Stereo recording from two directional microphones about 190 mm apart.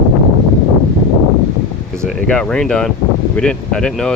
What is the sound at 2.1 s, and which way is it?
Speech, 5° left (ahead or behind).